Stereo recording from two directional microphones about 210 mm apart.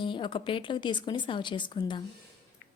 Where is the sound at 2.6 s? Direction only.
55° left (ahead or behind).